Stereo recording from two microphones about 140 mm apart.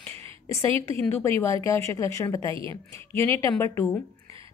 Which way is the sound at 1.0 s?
15° left (ahead or behind).